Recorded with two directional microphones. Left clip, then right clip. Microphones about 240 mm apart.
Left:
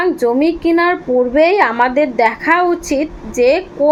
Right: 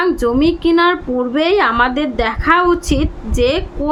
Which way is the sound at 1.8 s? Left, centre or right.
Right.